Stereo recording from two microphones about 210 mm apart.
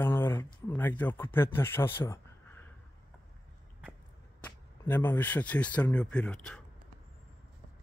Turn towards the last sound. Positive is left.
turn(degrees=5)  # may be behind; listen again after turning